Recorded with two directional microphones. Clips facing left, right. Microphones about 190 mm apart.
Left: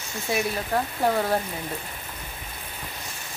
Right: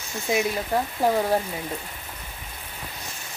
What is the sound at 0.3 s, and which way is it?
Speech, 20° right (ahead or behind).